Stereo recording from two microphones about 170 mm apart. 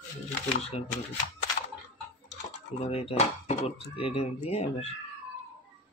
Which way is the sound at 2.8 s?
35° left (ahead or behind).